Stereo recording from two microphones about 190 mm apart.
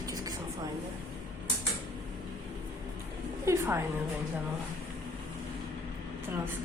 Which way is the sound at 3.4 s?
15° right (ahead or behind).